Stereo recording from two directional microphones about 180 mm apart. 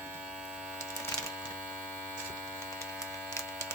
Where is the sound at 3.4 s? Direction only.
15° left (ahead or behind).